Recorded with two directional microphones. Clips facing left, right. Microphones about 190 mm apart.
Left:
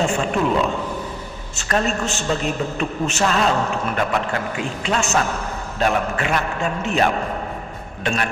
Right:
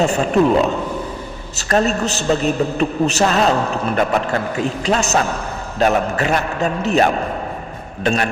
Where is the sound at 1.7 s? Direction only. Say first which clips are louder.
Right 4 dB; 40° right (ahead or behind).